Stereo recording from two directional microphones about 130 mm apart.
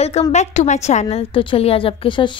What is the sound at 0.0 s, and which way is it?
A woman's voice, 55° left (ahead or behind).